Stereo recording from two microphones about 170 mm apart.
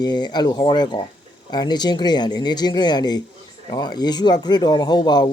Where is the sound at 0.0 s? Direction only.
25° left (ahead or behind).